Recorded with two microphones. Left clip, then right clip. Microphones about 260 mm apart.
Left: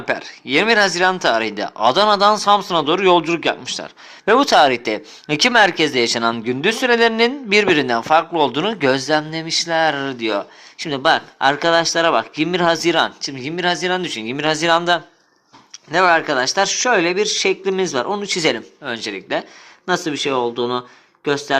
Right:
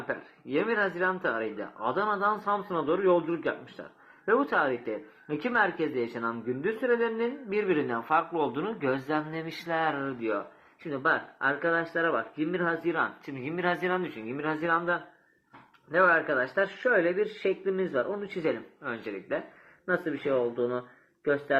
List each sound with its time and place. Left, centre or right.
0.1 s speech: left